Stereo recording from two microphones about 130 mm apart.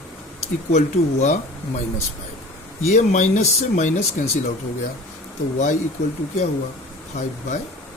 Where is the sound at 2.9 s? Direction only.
70° left (ahead or behind).